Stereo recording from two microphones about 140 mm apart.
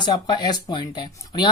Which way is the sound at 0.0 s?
30° left (ahead or behind).